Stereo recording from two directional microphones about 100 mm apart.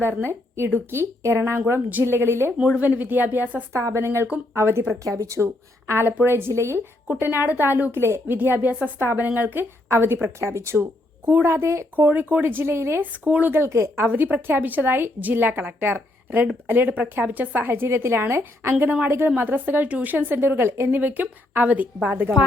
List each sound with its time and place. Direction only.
0.3 s a woman's voice: 25° right (ahead or behind)
2.6 s a woman's voice: 10° right (ahead or behind)